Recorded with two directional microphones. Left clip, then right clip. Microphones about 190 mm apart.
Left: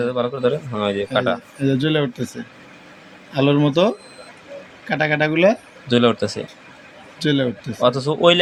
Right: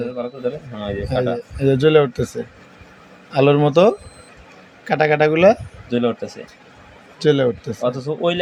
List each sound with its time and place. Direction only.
0.0 s a man's voice: 10° left (ahead or behind)
1.5 s speech: 35° right (ahead or behind)
5.9 s speech: 5° left (ahead or behind)
7.2 s speech: 30° right (ahead or behind)
7.8 s speech: 5° left (ahead or behind)